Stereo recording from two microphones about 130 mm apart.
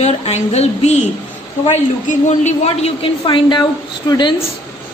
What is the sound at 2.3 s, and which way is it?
Speech, 60° left (ahead or behind).